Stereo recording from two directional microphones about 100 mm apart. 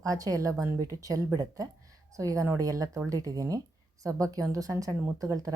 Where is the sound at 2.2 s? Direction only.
35° right (ahead or behind).